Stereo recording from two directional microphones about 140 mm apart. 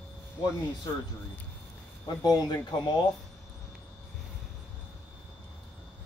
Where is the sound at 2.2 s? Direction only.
25° left (ahead or behind).